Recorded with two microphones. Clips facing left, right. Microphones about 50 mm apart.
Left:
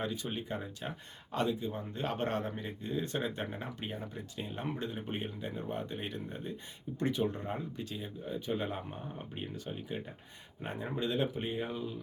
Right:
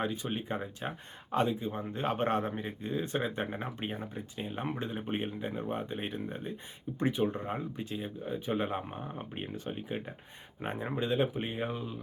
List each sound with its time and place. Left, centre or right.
0.0 s speech: right